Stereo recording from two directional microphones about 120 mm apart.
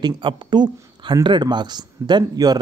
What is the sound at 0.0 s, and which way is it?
Speech, 40° right (ahead or behind).